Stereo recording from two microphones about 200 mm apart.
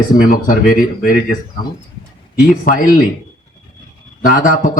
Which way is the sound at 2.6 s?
45° left (ahead or behind).